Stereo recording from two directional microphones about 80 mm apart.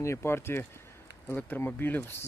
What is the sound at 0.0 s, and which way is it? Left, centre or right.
Speech, left.